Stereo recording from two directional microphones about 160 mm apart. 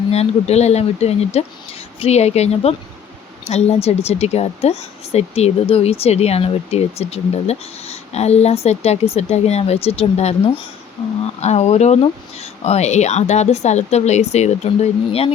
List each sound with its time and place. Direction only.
0.1 s a woman's voice: 40° left (ahead or behind)